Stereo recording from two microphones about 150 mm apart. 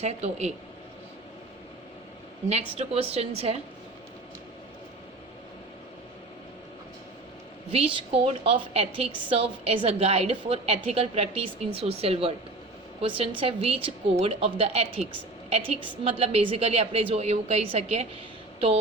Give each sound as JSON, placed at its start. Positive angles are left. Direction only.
{"t": 0.0, "sound": "a woman's voice", "side_deg": -45}
{"t": 2.5, "sound": "a woman's voice", "side_deg": -45}
{"t": 7.9, "sound": "a woman's voice", "side_deg": -35}